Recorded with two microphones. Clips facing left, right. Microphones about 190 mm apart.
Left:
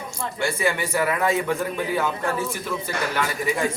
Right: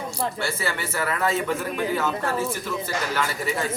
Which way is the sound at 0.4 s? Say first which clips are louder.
Left 4 dB; 15° left (ahead or behind).